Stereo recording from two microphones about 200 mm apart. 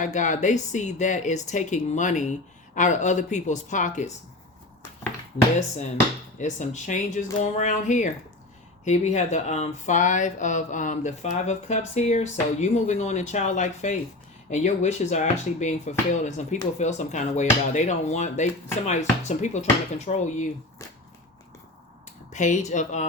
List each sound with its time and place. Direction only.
0.0 s speech: 35° left (ahead or behind)
6.4 s speech: 35° left (ahead or behind)
22.3 s speech: 35° left (ahead or behind)